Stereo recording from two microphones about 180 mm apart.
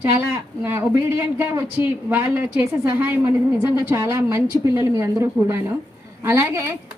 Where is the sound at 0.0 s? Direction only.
15° right (ahead or behind).